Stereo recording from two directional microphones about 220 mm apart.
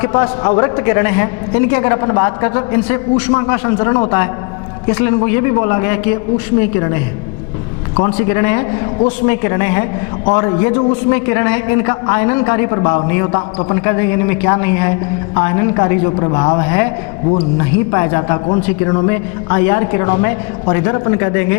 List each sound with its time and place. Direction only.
0.0 s a man's voice: 20° left (ahead or behind)
8.1 s a man's voice: 15° left (ahead or behind)